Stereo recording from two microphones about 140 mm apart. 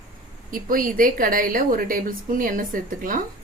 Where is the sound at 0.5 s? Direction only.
85° right.